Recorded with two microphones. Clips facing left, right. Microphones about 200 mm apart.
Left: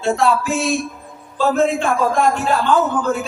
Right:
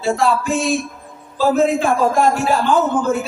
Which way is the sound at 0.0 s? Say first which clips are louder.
Even; centre (ahead or behind).